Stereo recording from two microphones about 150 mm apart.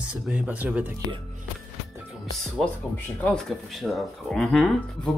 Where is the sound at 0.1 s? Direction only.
10° right (ahead or behind).